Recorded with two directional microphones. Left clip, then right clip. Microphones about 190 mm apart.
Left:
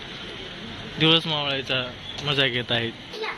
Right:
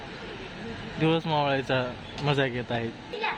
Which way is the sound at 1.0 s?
10° right (ahead or behind).